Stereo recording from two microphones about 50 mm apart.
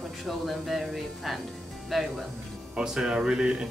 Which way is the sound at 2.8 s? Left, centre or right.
Centre.